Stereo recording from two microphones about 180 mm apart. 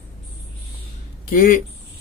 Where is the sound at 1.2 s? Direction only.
50° left (ahead or behind).